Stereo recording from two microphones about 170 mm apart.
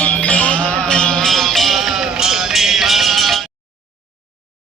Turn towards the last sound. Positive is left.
turn(degrees=0)  # may be behind; listen again after turning